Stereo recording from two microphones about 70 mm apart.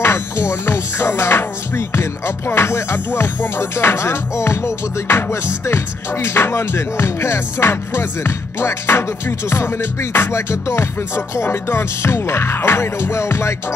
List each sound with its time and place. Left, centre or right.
0.0 s music: left